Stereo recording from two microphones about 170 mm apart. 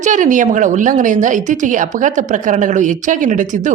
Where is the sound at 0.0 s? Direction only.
50° right (ahead or behind).